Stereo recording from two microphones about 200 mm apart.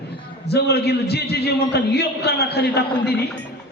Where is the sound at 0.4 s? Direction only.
55° left (ahead or behind).